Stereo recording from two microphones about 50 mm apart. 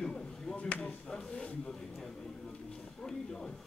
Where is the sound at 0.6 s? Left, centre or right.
Left.